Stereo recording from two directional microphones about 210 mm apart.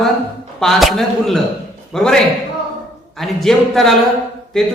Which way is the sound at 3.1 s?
Centre (ahead or behind).